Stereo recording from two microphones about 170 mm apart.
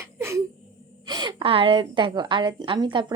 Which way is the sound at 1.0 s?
25° right (ahead or behind).